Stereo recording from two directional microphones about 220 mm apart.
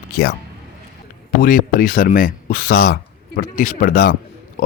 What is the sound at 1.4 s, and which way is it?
Speech, 40° left (ahead or behind).